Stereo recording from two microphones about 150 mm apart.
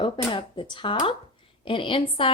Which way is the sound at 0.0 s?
35° left (ahead or behind).